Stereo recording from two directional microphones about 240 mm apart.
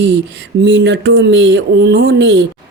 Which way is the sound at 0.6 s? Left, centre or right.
Right.